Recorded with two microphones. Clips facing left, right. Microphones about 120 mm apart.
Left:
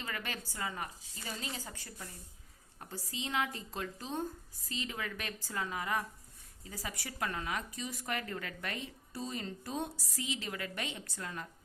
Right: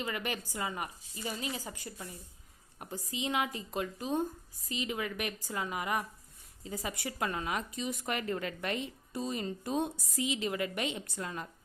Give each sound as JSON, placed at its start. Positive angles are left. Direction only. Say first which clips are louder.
{"t": 0.0, "sound": "a woman's voice", "louder": "right 5 dB", "side_deg": -15}